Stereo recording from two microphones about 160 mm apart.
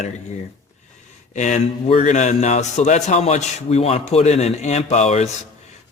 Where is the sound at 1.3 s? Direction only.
50° left (ahead or behind).